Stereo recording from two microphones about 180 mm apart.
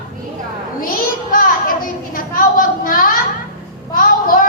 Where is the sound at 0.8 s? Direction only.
50° left (ahead or behind).